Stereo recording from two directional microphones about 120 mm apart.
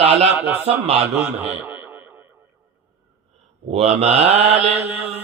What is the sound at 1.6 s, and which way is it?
Radio, 15° right (ahead or behind).